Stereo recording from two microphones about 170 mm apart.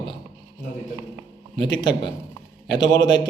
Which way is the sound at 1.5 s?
25° left (ahead or behind).